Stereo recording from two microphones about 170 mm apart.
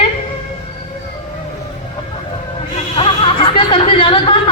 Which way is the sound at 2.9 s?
35° left (ahead or behind).